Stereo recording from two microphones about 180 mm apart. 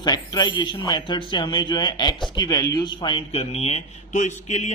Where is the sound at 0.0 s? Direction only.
25° left (ahead or behind).